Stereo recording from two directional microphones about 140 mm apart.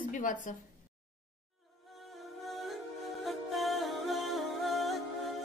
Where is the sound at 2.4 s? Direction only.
Centre (ahead or behind).